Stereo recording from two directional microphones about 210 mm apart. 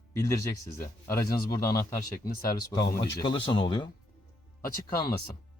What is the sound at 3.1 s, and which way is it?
Speech, 20° left (ahead or behind).